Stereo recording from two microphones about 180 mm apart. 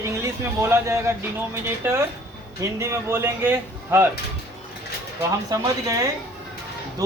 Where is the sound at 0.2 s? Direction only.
15° right (ahead or behind).